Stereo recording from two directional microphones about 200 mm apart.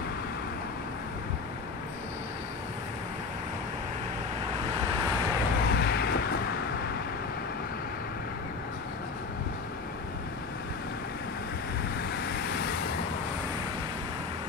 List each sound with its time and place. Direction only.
5.7 s vehicle: 55° left (ahead or behind)